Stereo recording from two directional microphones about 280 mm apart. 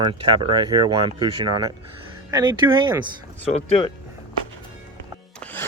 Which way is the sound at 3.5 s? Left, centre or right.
Left.